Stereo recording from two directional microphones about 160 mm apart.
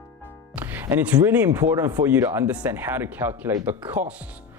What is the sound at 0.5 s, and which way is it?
Speech, 10° right (ahead or behind).